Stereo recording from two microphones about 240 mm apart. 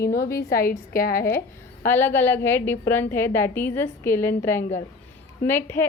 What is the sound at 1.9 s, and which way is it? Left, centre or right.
A woman's voice, centre.